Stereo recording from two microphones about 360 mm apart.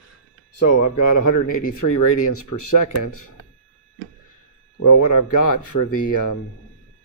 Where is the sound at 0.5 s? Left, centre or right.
Left.